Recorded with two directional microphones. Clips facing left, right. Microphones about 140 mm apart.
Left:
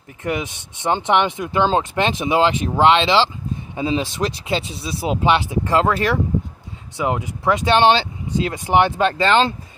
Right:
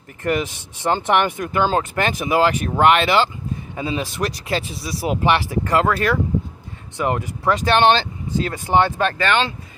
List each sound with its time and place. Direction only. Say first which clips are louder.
0.2 s speech: right 3 dB; 15° left (ahead or behind)